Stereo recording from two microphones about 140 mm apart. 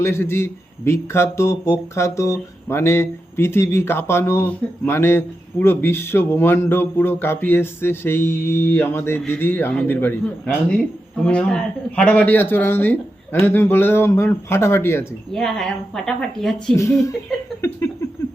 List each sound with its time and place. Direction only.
0.0 s speech: 15° left (ahead or behind)
15.3 s speech: 5° left (ahead or behind)
16.7 s speech: 20° left (ahead or behind)